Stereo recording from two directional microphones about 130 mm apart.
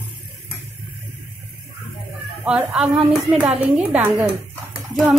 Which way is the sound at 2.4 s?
5° right (ahead or behind).